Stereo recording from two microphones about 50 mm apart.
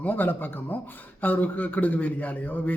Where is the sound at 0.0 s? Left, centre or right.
Left.